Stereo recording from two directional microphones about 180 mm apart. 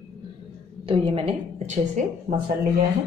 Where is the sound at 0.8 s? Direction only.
30° right (ahead or behind).